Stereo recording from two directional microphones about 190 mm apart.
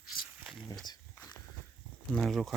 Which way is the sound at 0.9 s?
20° left (ahead or behind).